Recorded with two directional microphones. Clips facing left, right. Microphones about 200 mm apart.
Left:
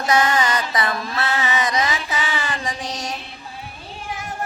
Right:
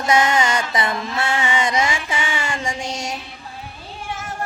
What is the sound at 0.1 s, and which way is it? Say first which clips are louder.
Mantra: right 1 dB; 25° right (ahead or behind).